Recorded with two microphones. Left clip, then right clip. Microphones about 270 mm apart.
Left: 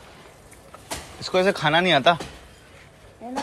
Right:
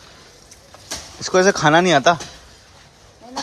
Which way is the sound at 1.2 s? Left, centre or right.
Centre.